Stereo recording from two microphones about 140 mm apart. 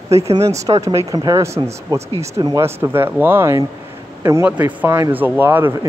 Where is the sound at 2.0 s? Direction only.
50° right (ahead or behind).